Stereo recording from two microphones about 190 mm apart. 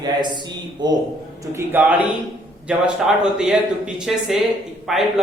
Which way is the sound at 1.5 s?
10° right (ahead or behind).